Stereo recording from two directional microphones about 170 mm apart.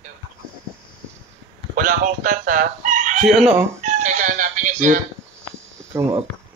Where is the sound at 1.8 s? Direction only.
55° right (ahead or behind).